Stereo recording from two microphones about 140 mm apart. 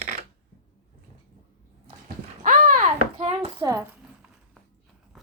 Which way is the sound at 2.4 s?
80° right.